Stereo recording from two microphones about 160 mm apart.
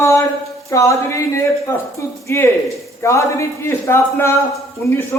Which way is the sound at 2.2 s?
15° left (ahead or behind).